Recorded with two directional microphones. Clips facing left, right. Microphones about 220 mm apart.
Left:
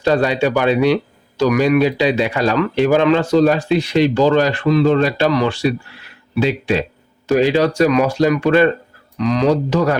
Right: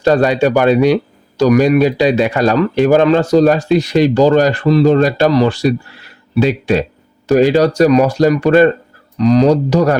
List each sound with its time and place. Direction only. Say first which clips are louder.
0.0 s speech: right 4 dB; 45° right (ahead or behind)